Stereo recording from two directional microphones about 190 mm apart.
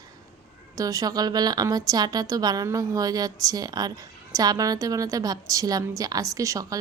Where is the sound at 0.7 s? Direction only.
20° right (ahead or behind).